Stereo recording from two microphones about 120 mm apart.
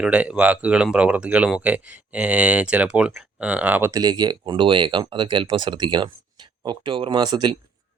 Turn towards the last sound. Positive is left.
turn(degrees=-40)  # may be behind; listen again after turning